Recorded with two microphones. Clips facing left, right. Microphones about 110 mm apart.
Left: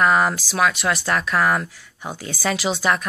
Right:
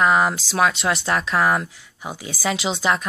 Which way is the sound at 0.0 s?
15° right (ahead or behind).